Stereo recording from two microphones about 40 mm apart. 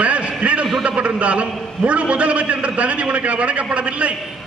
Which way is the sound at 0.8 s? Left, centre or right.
Right.